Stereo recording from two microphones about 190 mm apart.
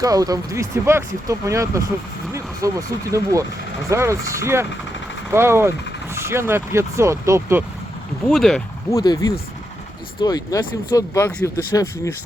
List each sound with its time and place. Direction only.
0.0 s speech: 20° right (ahead or behind)
8.3 s speech: centre (ahead or behind)
8.9 s speech: 20° left (ahead or behind)